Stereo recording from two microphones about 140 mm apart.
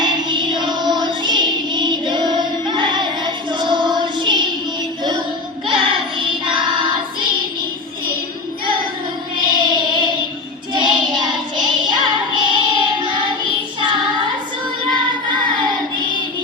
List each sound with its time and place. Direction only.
0.0 s music: 35° right (ahead or behind)
5.6 s child singing: 35° right (ahead or behind)
9.4 s music: 35° right (ahead or behind)
10.8 s child singing: 35° right (ahead or behind)